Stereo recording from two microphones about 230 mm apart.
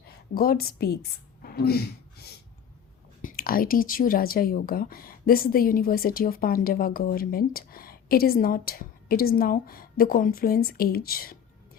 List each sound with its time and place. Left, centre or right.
0.3 s speech: left
1.4 s a sound: left
3.2 s speech: left